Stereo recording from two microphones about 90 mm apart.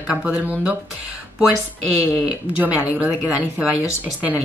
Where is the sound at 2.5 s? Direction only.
15° right (ahead or behind).